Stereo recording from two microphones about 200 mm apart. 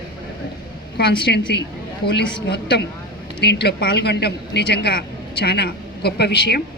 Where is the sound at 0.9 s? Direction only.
55° left (ahead or behind).